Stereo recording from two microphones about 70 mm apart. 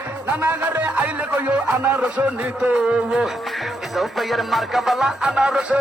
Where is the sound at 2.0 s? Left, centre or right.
Centre.